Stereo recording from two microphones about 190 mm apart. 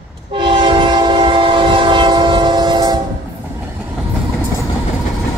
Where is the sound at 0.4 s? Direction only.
25° right (ahead or behind).